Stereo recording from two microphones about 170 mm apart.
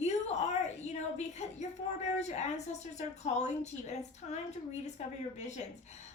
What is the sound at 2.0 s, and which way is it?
A woman's voice, 40° left (ahead or behind).